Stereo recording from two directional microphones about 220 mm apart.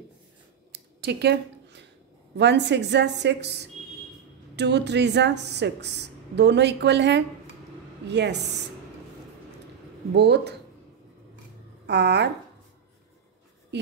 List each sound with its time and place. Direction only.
0.7 s a sound: 50° right (ahead or behind)
2.3 s speech: 50° right (ahead or behind)
10.1 s speech: 50° right (ahead or behind)
11.8 s speech: 50° right (ahead or behind)